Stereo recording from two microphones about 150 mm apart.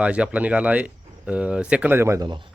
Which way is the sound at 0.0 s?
10° right (ahead or behind).